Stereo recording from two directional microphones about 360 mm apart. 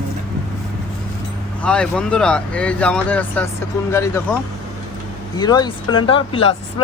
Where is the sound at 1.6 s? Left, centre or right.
Centre.